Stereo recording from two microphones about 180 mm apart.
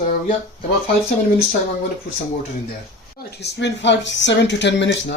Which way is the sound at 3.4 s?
75° left (ahead or behind).